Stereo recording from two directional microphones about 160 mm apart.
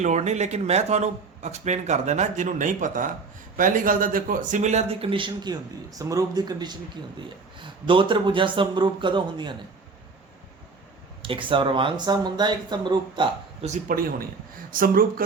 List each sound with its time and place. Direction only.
0.0 s speech: 45° right (ahead or behind); by 9.6 s 30° right (ahead or behind)
11.2 s speech: 30° right (ahead or behind)
13.7 s a man's voice: 60° right (ahead or behind)